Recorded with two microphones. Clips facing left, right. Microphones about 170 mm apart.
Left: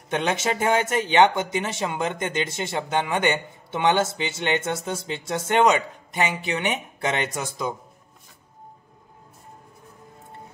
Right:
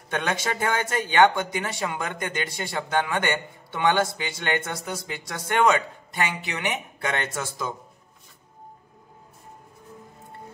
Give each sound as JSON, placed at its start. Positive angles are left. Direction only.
{"t": 0.1, "sound": "speech", "side_deg": 20}